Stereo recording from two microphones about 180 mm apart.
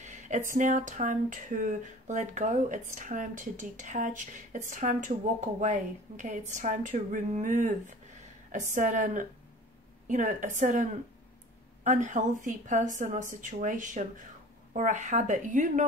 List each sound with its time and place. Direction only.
0.0 s a woman's voice: 45° right (ahead or behind)